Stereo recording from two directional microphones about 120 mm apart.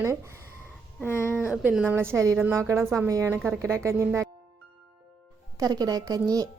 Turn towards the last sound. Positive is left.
turn(degrees=-30)  # may be behind; listen again after turning